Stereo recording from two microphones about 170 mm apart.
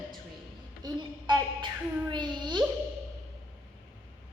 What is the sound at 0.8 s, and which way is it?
A woman's voice, 25° right (ahead or behind).